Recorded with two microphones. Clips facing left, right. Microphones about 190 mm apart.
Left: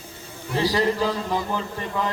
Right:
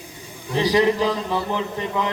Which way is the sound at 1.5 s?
20° right (ahead or behind).